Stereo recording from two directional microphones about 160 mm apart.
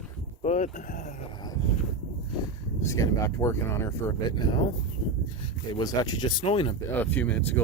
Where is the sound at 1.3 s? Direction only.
25° left (ahead or behind).